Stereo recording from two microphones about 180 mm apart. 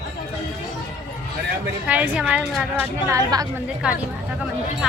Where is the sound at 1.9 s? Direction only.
10° right (ahead or behind).